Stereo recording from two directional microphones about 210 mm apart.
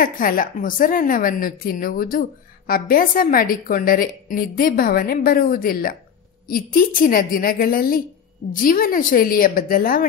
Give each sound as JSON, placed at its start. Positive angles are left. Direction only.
{"t": 0.0, "sound": "a woman's voice", "side_deg": 40}